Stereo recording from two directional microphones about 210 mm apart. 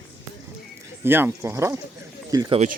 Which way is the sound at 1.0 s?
10° right (ahead or behind).